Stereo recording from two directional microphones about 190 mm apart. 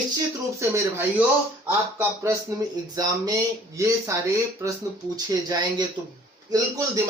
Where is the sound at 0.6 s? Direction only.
15° right (ahead or behind).